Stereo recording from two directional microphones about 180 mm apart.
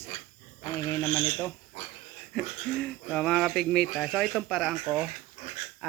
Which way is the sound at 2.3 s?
5° left (ahead or behind).